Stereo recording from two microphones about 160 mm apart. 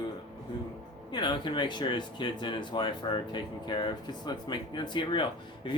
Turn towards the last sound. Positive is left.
turn(degrees=30)  # may be behind; listen again after turning